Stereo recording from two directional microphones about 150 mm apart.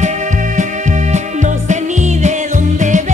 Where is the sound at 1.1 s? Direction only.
50° right (ahead or behind).